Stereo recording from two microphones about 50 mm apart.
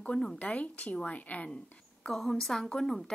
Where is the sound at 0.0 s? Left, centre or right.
Left.